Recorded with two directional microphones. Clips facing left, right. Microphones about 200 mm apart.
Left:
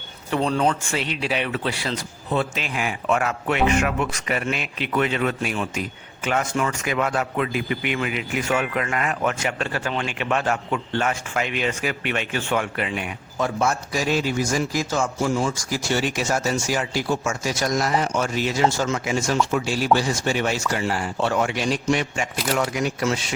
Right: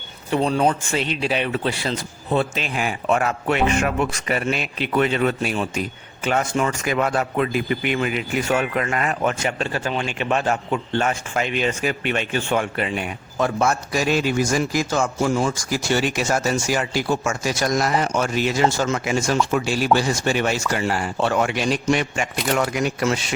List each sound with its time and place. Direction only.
0.3 s speech: 15° right (ahead or behind); by 13.1 s 35° right (ahead or behind)
13.4 s a man's voice: 60° right (ahead or behind)